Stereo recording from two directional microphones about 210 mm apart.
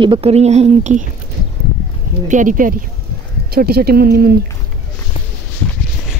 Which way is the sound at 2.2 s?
40° right (ahead or behind).